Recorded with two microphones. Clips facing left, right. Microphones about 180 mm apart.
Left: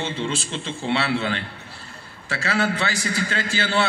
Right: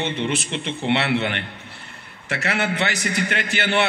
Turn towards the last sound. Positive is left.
turn(degrees=-20)  # may be behind; listen again after turning